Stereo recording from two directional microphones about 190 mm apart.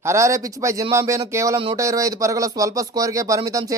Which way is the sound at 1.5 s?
25° right (ahead or behind).